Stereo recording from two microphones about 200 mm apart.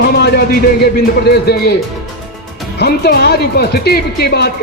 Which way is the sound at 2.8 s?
50° left (ahead or behind).